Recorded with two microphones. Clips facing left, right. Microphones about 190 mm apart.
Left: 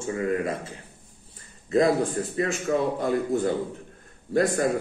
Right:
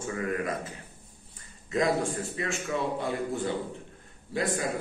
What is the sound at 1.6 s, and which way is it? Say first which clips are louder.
A man's voice: left 5 dB; 35° left (ahead or behind).